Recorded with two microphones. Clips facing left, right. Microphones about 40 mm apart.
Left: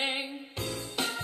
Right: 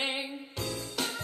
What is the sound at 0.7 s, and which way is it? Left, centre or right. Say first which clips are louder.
Music: left 2 dB; left.